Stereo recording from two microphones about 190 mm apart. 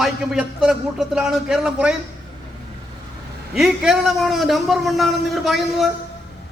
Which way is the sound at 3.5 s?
5° right (ahead or behind).